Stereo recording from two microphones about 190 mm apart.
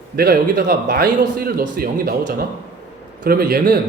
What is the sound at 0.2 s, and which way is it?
A man's voice, 55° right (ahead or behind).